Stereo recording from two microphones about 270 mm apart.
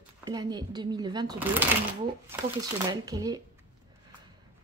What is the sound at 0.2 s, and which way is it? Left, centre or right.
Speech, centre.